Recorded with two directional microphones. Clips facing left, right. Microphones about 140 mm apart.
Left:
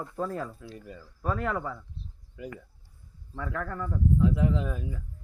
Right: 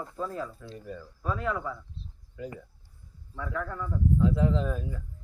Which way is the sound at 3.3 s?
65° left (ahead or behind).